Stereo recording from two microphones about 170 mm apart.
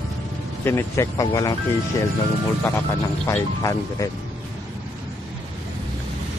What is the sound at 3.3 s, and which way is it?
Speech, 20° left (ahead or behind).